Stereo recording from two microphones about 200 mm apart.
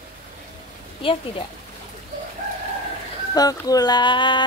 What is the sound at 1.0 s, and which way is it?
Speech, 25° left (ahead or behind).